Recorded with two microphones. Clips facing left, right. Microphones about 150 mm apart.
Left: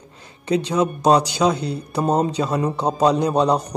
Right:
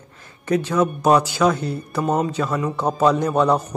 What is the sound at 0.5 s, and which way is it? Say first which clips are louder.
A man's voice: even; 15° left (ahead or behind).